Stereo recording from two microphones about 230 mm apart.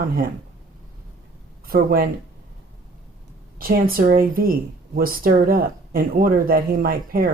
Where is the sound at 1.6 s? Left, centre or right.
Right.